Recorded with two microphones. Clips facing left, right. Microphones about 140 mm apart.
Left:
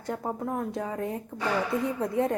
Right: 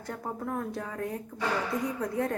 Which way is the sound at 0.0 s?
20° left (ahead or behind).